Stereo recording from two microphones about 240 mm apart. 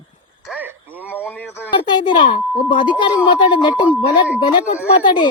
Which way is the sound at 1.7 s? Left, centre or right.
Centre.